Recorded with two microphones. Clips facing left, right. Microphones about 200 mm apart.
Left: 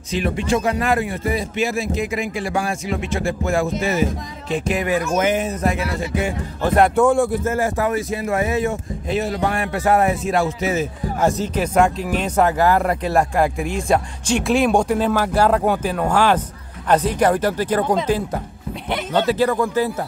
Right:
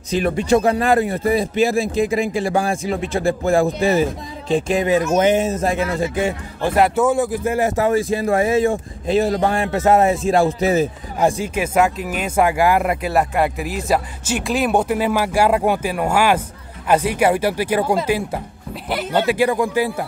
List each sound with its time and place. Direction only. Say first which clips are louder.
0.1 s a man's voice: right 4 dB; 40° right (ahead or behind)
6.6 s speech: left 1 dB; 5° right (ahead or behind)
7.4 s speech: right 2 dB; 20° right (ahead or behind)
11.1 s speech: right 1 dB; 10° right (ahead or behind)